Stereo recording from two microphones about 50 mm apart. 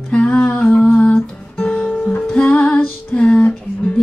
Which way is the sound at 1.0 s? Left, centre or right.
Left.